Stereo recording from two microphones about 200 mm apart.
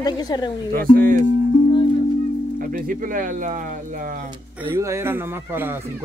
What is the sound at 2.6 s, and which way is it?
Speech, 45° right (ahead or behind).